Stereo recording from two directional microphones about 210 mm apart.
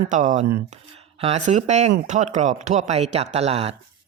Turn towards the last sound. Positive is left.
turn(degrees=-30)  # may be behind; listen again after turning